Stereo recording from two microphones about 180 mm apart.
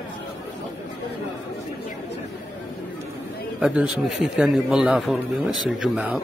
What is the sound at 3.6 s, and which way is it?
A man's voice, 5° right (ahead or behind).